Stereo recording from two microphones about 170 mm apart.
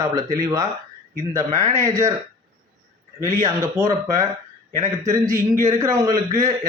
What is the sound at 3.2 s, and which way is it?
A man's voice, 15° right (ahead or behind).